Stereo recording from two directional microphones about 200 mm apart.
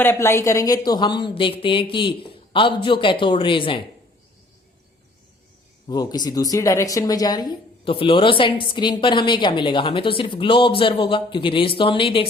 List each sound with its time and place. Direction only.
0.0 s a woman's voice: 10° left (ahead or behind)
5.9 s a woman's voice: 20° left (ahead or behind)